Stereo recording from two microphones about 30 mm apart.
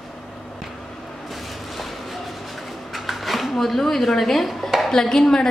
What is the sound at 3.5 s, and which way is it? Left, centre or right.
A woman's voice, centre.